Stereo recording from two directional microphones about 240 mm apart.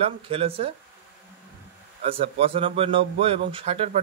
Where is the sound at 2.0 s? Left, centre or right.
Right.